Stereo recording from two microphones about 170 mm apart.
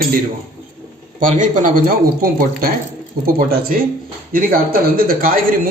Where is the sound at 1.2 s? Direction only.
50° right (ahead or behind).